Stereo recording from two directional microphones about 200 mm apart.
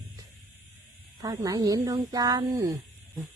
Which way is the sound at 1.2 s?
15° right (ahead or behind).